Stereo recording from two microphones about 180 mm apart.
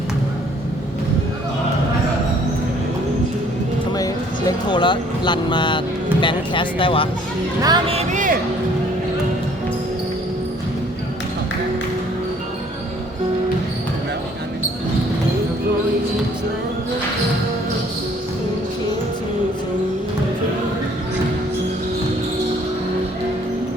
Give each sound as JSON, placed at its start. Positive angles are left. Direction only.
{"t": 3.9, "sound": "a sound", "side_deg": 20}
{"t": 6.2, "sound": "speech", "side_deg": 25}
{"t": 7.6, "sound": "speech", "side_deg": -25}
{"t": 7.9, "sound": "music", "side_deg": -45}